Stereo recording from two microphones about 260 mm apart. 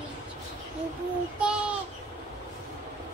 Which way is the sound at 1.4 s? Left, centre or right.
Centre.